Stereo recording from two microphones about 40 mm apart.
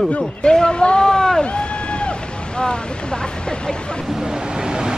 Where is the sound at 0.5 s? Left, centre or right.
Centre.